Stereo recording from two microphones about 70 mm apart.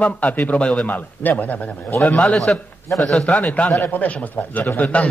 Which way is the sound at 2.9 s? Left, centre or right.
Centre.